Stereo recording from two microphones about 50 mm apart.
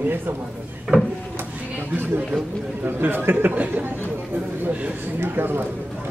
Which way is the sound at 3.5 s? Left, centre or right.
Right.